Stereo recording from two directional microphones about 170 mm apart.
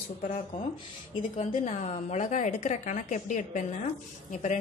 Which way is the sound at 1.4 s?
45° left (ahead or behind).